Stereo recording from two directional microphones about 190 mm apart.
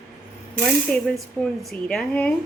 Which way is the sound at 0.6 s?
Centre (ahead or behind).